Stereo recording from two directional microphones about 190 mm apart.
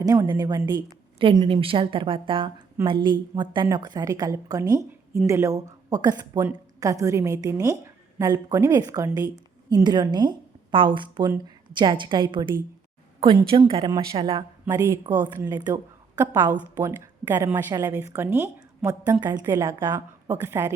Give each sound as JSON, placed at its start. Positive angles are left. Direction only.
{"t": 0.0, "sound": "a woman's voice", "side_deg": -20}
{"t": 14.6, "sound": "a woman's voice", "side_deg": -15}
{"t": 19.3, "sound": "a woman's voice", "side_deg": -20}